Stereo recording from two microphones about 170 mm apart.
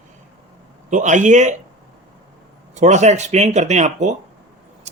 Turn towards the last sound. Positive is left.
turn(degrees=-40)  # may be behind; listen again after turning